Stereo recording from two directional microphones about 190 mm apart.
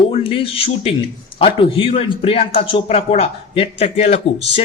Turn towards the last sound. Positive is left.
turn(degrees=35)  # may be behind; listen again after turning